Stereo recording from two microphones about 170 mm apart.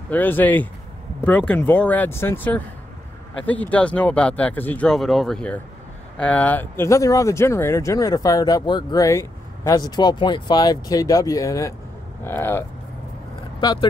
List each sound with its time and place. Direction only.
0.1 s speech: 10° left (ahead or behind)
13.6 s speech: 25° left (ahead or behind)